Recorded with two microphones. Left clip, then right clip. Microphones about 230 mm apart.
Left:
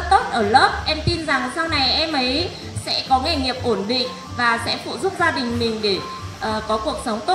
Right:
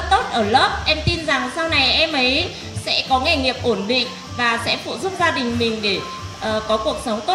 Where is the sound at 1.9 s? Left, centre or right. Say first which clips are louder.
Right 3 dB; right.